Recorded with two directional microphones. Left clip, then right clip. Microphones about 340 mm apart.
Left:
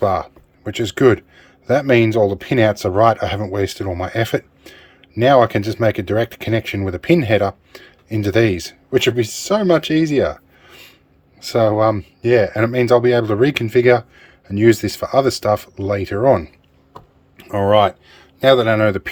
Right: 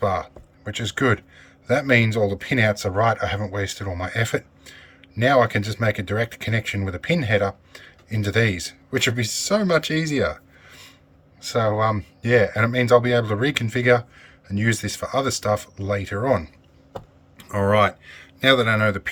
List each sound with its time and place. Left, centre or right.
0.0 s speech: centre
18.1 s a sound: left
18.4 s speech: centre